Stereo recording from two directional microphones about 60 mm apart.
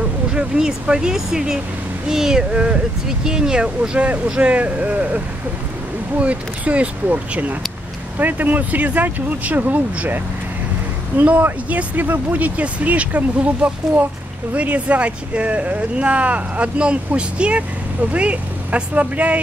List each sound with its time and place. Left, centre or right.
0.3 s speech: centre